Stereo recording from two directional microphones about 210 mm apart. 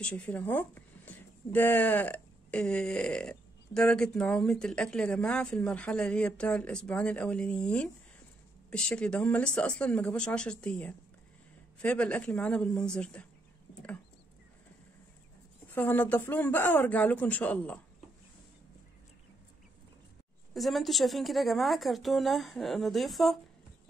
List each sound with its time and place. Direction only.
0.0 s speech: 5° left (ahead or behind)
15.7 s speech: 10° left (ahead or behind)
20.5 s speech: centre (ahead or behind)